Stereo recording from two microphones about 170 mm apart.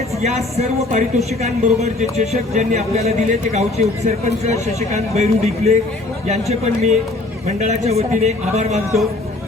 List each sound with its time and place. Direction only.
0.2 s speech: 40° right (ahead or behind)